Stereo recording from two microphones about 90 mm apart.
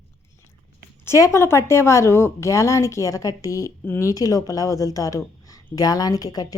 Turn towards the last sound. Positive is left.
turn(degrees=45)  # may be behind; listen again after turning